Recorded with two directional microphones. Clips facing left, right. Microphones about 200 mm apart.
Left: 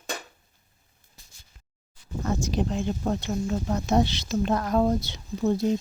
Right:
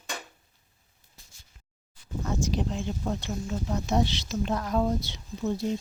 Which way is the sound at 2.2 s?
55° left (ahead or behind).